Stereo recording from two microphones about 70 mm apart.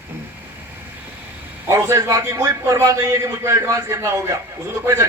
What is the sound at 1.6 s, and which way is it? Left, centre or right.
Speech, right.